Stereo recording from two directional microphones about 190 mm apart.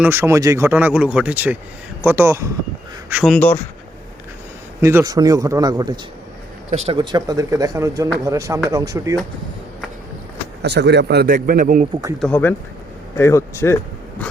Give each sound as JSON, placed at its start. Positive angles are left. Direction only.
{"t": 0.0, "sound": "speech", "side_deg": -10}
{"t": 3.3, "sound": "speech", "side_deg": 10}
{"t": 4.8, "sound": "speech", "side_deg": -15}
{"t": 6.7, "sound": "speech", "side_deg": -35}
{"t": 10.6, "sound": "speech", "side_deg": -60}
{"t": 12.2, "sound": "speech", "side_deg": 10}